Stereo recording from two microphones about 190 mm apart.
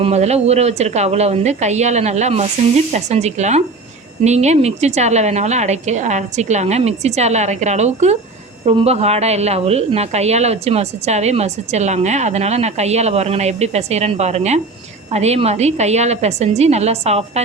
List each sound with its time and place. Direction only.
0.0 s a woman's voice: 35° right (ahead or behind)